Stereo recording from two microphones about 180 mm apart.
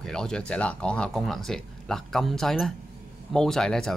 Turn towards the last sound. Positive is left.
turn(degrees=5)  # may be behind; listen again after turning